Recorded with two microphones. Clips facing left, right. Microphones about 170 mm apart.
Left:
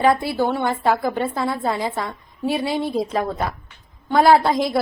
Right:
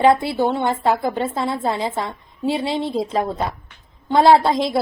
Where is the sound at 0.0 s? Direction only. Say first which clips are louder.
Right 2 dB; 25° right (ahead or behind).